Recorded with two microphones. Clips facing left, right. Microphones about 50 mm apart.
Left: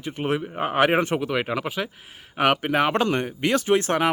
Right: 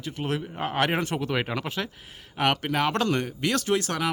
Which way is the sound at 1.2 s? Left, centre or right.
Centre.